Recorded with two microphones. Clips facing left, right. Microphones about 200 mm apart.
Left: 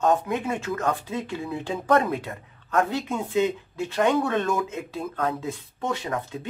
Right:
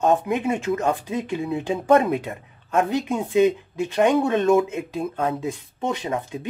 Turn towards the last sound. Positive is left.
turn(degrees=-20)  # may be behind; listen again after turning